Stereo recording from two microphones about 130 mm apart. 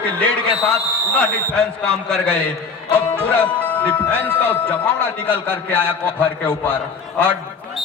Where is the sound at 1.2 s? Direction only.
5° left (ahead or behind).